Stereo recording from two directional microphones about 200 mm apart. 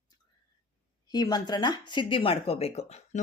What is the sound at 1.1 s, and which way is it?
Speech, 20° left (ahead or behind).